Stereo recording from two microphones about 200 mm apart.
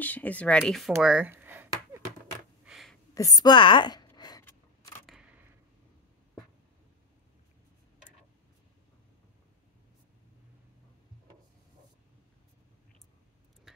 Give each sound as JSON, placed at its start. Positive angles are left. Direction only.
{"t": 0.0, "sound": "speech", "side_deg": 10}
{"t": 2.6, "sound": "a sound", "side_deg": 0}
{"t": 3.2, "sound": "scissors", "side_deg": 20}